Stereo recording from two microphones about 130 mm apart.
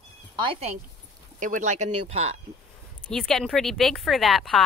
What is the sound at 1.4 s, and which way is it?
Speech, 80° right.